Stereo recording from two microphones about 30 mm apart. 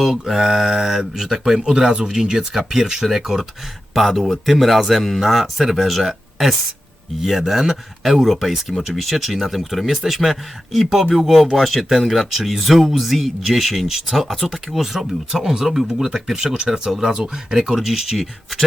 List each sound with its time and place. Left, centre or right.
0.0 s speech: centre
1.7 s speech: right; by 13.5 s centre
13.5 s speech: centre